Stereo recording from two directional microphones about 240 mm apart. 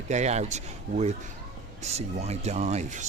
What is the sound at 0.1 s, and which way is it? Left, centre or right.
Speech, right.